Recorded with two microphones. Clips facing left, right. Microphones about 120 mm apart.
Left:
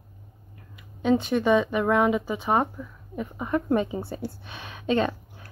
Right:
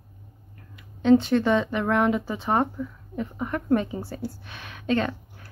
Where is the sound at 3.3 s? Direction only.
15° left (ahead or behind).